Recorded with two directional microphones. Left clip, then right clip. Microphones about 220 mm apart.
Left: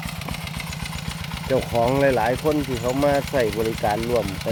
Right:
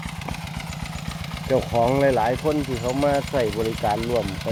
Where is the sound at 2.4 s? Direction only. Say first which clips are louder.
Left 1 dB; 10° left (ahead or behind).